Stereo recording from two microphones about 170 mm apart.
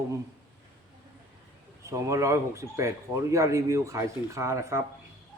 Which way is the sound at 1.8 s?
20° right (ahead or behind).